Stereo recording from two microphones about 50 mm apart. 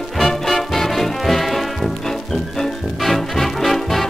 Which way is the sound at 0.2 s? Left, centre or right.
Centre.